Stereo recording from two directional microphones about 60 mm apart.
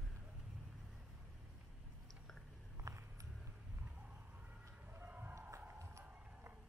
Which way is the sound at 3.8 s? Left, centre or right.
Right.